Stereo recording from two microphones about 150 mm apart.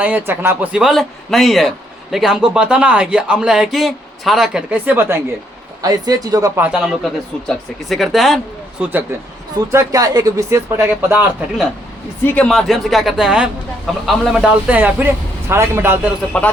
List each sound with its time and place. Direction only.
0.0 s speech: 15° right (ahead or behind)
5.8 s speech: 25° right (ahead or behind)
6.6 s speech: 5° right (ahead or behind)
8.8 s a man's voice: 10° right (ahead or behind)
9.6 s speech: 25° right (ahead or behind)
12.2 s a man's voice: 10° left (ahead or behind); by 16.1 s 15° right (ahead or behind)
16.3 s speech: 10° left (ahead or behind)